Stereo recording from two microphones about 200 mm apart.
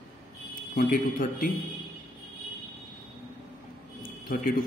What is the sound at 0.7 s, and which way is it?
Speech, 45° left (ahead or behind).